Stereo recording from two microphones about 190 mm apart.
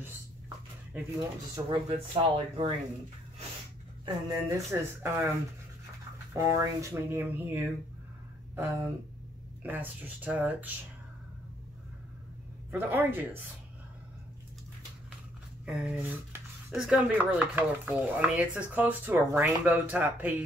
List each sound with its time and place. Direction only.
1.5 s speech: 25° right (ahead or behind)
4.0 s speech: 15° right (ahead or behind)
6.3 s speech: 15° right (ahead or behind)
12.7 s speech: 10° right (ahead or behind)
15.6 s speech: 5° right (ahead or behind)